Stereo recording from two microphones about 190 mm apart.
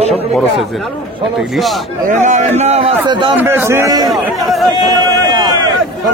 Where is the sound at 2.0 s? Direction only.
40° right (ahead or behind).